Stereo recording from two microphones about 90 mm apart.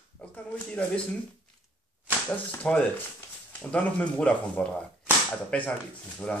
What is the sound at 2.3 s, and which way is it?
Speech, 20° left (ahead or behind).